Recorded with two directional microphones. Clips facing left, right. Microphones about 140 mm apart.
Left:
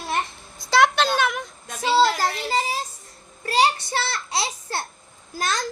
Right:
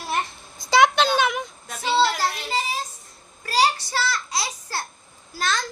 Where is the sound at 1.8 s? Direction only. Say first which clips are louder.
Left 2 dB; 40° left (ahead or behind).